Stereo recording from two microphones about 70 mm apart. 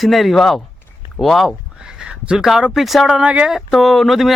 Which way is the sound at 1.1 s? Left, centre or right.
Centre.